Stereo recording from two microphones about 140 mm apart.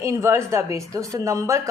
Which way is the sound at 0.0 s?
20° right (ahead or behind).